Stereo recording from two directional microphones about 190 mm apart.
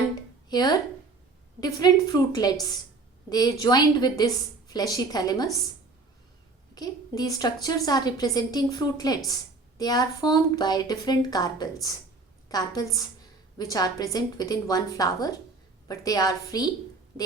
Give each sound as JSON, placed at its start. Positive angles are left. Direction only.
{"t": 0.5, "sound": "a woman's voice", "side_deg": 20}
{"t": 6.7, "sound": "a woman's voice", "side_deg": 20}